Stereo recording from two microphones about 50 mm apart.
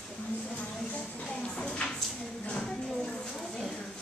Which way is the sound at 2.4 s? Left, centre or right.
Centre.